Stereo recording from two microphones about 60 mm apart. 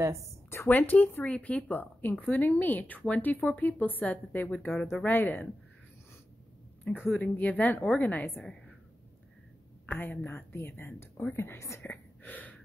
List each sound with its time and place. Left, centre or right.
0.7 s a woman's voice: left
6.8 s a woman's voice: left
9.8 s a woman's voice: left
11.9 s a sound: left